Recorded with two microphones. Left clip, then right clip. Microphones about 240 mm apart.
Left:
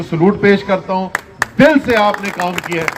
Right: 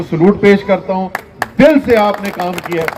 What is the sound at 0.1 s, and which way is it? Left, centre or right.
A man's voice, left.